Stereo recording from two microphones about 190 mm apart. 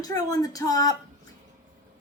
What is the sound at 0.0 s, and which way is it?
Speech, 20° left (ahead or behind).